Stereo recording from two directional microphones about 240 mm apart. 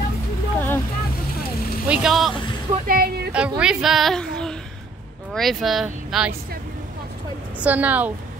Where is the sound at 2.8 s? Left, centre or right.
Right.